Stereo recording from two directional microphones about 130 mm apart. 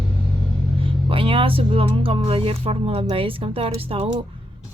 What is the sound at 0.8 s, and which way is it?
Speech, 45° right (ahead or behind).